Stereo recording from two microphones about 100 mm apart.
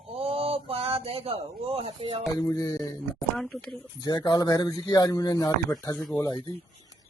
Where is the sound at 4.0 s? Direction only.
45° left (ahead or behind).